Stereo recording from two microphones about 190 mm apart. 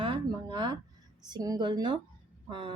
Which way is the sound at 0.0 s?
25° right (ahead or behind).